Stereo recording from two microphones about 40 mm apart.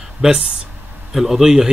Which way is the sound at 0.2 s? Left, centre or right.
Right.